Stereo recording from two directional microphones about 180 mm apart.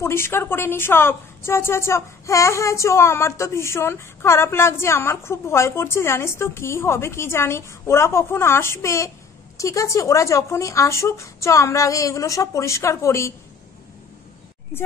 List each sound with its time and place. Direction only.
0.0 s a woman's voice: 15° left (ahead or behind)